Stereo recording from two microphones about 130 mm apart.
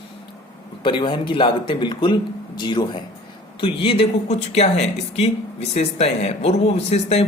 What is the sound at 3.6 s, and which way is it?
Speech, 45° left (ahead or behind).